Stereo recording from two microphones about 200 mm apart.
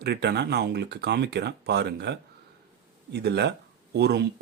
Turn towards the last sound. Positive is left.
turn(degrees=-55)  # may be behind; listen again after turning